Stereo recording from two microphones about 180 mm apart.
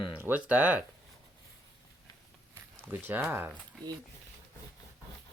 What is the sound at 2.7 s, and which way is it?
Speech, 10° right (ahead or behind).